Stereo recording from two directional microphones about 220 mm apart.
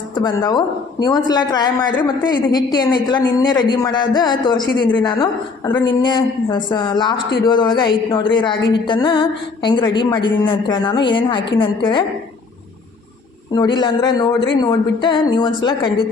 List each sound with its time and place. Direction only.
0.1 s a woman's voice: 20° left (ahead or behind)
13.5 s a woman's voice: 20° left (ahead or behind)